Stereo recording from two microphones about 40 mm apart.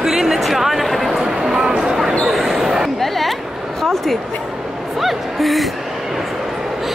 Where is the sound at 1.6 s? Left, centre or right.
Right.